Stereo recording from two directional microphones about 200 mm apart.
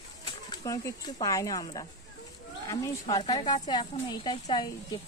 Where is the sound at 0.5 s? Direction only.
20° left (ahead or behind).